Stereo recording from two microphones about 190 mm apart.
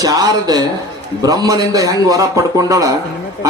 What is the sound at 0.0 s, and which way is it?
A man's voice, 20° right (ahead or behind).